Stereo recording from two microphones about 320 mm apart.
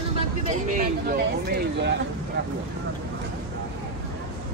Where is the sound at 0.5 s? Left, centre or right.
Right.